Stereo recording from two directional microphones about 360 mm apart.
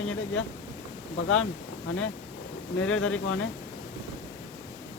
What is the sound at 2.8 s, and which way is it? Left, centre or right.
Speech, left.